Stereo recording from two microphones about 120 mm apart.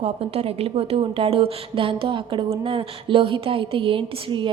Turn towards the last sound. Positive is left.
turn(degrees=-45)  # may be behind; listen again after turning